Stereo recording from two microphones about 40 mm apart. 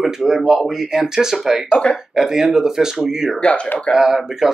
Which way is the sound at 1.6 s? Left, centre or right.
Left.